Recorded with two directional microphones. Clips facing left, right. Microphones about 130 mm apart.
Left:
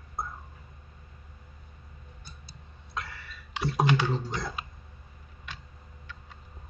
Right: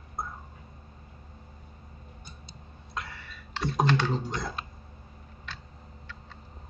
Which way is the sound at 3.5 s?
5° left (ahead or behind).